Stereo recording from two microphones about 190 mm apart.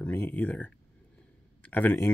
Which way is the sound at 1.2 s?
10° left (ahead or behind).